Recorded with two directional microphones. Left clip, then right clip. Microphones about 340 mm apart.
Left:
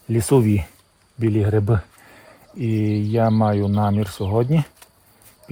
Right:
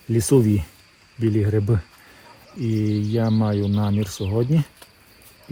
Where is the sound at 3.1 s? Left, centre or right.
Centre.